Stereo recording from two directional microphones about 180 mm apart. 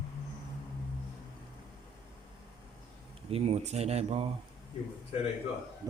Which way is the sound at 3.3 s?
35° right (ahead or behind).